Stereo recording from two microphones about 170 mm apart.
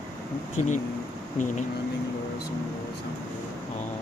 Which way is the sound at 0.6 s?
45° left (ahead or behind).